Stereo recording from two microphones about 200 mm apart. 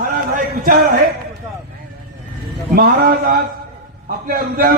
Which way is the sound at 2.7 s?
45° right (ahead or behind).